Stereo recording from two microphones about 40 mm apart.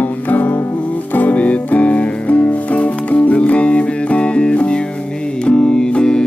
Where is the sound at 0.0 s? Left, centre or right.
Left.